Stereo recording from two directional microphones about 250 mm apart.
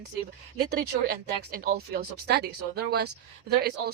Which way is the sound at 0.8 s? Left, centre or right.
Right.